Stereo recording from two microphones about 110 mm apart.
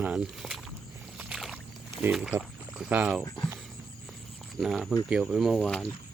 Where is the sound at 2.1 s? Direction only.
5° right (ahead or behind).